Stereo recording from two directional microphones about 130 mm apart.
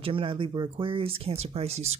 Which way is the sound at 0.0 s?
40° right (ahead or behind).